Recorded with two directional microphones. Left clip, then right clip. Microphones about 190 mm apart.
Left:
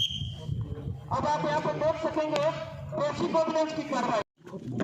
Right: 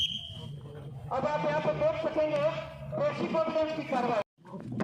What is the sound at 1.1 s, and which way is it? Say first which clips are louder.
Speech: left 2 dB; 30° right (ahead or behind).